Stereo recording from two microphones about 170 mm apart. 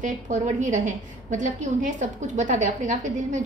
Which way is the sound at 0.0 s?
45° right (ahead or behind).